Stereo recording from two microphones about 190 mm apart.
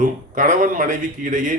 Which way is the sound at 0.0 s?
45° right (ahead or behind).